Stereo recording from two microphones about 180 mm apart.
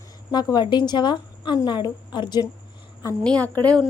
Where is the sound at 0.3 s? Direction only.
20° left (ahead or behind).